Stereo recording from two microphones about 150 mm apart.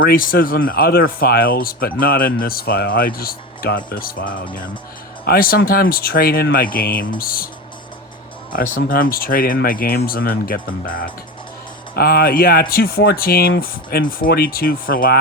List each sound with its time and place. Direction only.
0.0 s speech: 75° left (ahead or behind)
5.2 s speech: 85° left
8.5 s speech: 65° left (ahead or behind); by 10.6 s 85° left
10.8 s speech: 70° left (ahead or behind)
11.9 s speech: 90° left